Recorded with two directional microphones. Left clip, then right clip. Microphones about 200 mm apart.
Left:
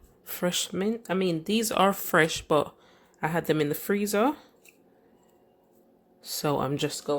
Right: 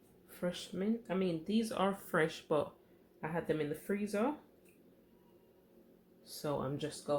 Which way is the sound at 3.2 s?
55° left (ahead or behind).